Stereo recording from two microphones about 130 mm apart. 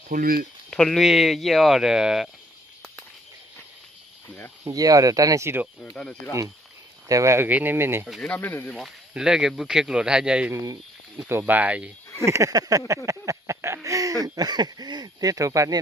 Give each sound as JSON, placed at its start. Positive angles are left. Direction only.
{"t": 0.1, "sound": "speech", "side_deg": -90}
{"t": 0.7, "sound": "speech", "side_deg": 5}
{"t": 4.6, "sound": "speech", "side_deg": -25}
{"t": 5.8, "sound": "speech", "side_deg": 5}
{"t": 7.1, "sound": "speech", "side_deg": -25}
{"t": 8.0, "sound": "speech", "side_deg": 5}
{"t": 8.7, "sound": "speech", "side_deg": 0}
{"t": 10.5, "sound": "speech", "side_deg": -30}
{"t": 12.3, "sound": "speech", "side_deg": -25}
{"t": 13.1, "sound": "a sound", "side_deg": -25}
{"t": 13.8, "sound": "speech", "side_deg": -25}